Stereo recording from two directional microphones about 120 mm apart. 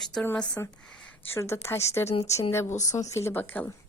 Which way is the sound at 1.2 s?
20° left (ahead or behind).